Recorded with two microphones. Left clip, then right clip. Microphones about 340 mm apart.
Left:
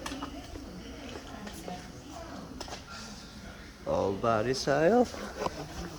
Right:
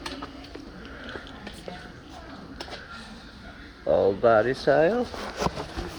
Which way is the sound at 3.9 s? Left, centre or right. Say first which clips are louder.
Right 9 dB; centre.